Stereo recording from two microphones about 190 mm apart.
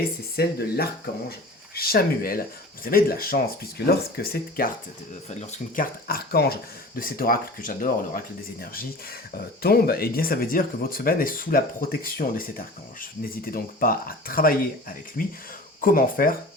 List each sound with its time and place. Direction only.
0.3 s speech: 55° left (ahead or behind)
5.3 s speech: 35° left (ahead or behind)